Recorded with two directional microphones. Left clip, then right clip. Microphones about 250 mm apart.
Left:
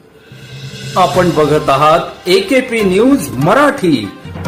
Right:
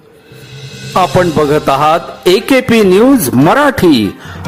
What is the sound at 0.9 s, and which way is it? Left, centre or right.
Speech, right.